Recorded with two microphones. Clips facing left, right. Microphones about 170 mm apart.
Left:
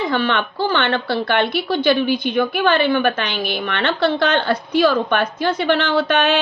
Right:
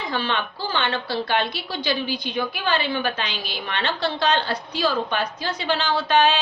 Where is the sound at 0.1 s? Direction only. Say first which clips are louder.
Left 6 dB; 65° left (ahead or behind).